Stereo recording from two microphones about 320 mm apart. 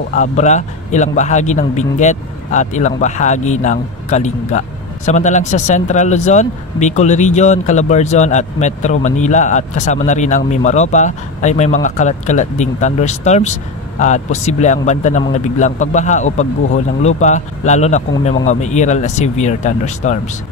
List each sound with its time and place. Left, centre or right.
0.1 s a man's voice: left